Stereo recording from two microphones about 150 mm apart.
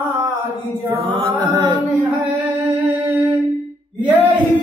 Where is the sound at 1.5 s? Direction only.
20° right (ahead or behind).